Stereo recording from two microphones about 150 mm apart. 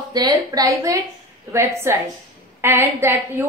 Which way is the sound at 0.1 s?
25° right (ahead or behind).